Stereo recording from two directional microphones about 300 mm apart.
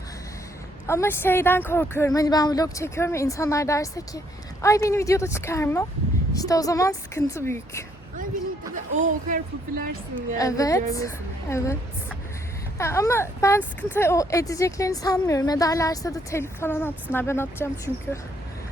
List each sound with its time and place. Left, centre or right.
0.9 s speech: centre
8.7 s speech: right
10.3 s speech: centre
12.8 s speech: centre